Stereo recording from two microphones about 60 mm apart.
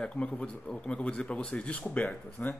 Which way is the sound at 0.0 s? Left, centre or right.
Centre.